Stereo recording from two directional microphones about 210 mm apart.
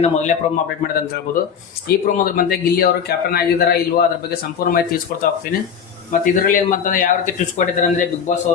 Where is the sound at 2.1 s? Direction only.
45° left (ahead or behind).